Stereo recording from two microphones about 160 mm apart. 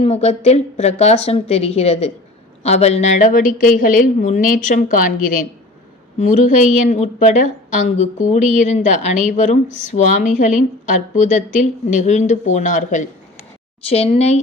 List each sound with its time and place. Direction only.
0.0 s a woman's voice: 40° left (ahead or behind)
13.8 s a woman's voice: 40° left (ahead or behind)